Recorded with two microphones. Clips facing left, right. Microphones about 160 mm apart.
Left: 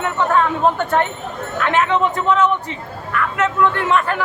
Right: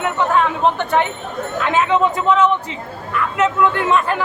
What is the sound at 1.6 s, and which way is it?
Speech, 20° right (ahead or behind).